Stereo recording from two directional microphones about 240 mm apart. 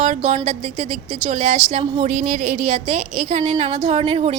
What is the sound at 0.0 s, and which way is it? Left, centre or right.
A woman's voice, right.